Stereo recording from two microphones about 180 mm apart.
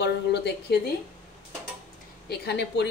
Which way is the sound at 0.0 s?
70° left (ahead or behind).